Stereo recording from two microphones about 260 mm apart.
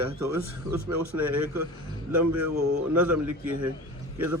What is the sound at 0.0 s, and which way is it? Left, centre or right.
A man's voice, right.